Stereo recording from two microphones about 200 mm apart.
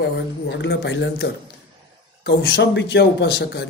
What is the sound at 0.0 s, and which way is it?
A man's voice, 60° left (ahead or behind).